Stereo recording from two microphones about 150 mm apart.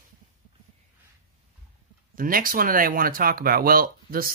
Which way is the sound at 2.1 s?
70° right (ahead or behind).